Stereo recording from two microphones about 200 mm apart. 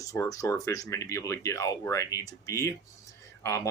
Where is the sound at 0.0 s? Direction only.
15° left (ahead or behind).